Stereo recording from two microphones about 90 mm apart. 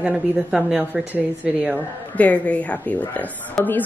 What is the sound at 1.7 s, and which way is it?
A woman's voice, 15° left (ahead or behind).